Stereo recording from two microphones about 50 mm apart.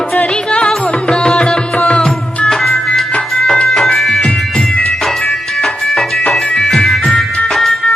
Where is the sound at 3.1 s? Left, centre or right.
Left.